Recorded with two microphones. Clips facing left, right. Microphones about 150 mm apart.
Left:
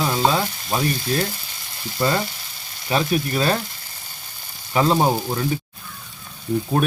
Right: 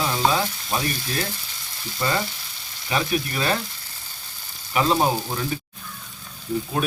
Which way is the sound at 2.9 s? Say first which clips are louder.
Left 4 dB; 30° left (ahead or behind).